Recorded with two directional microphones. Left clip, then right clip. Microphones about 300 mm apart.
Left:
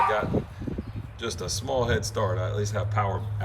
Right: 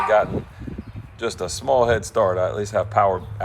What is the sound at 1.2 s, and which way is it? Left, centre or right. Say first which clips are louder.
Speech: right 7 dB; centre.